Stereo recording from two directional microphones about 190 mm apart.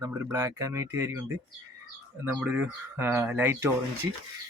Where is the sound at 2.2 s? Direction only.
5° right (ahead or behind).